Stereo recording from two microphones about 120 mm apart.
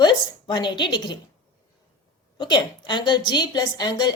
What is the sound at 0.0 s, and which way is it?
A woman's voice, 40° left (ahead or behind).